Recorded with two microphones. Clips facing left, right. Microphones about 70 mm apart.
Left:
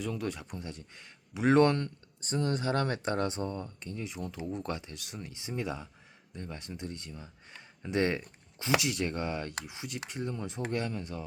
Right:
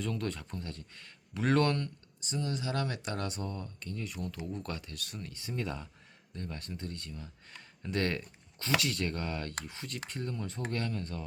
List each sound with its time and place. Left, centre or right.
0.0 s speech: centre
2.2 s speech: left; by 11.2 s centre